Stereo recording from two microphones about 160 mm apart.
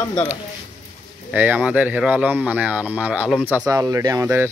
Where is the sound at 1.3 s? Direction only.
10° right (ahead or behind).